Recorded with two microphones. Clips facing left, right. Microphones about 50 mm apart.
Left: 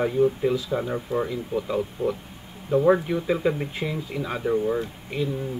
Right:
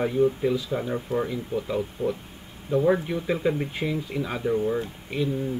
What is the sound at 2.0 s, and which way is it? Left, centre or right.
Speech, left.